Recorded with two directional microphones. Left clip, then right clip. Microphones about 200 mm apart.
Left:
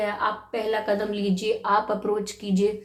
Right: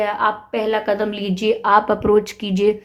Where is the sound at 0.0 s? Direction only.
45° right (ahead or behind).